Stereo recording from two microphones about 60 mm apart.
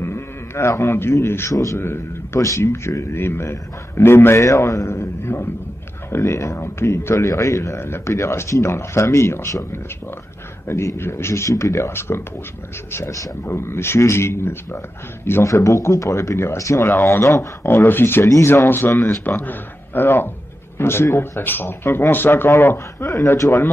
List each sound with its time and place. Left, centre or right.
0.0 s a sound: left
1.2 s speech: left
1.5 s speech: left
1.8 s a man's voice: left
2.4 s speech: left
7.2 s speech: left
13.5 s speech: left
15.4 s speech: left
16.5 s speech: left
17.6 s speech: left
19.2 s speech: left
23.2 s speech: left